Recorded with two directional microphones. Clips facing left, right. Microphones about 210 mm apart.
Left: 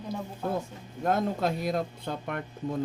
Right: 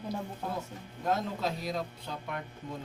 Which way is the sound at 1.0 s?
55° left (ahead or behind).